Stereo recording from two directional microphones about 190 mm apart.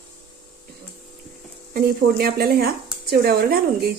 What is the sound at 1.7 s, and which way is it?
Speech, 50° right (ahead or behind).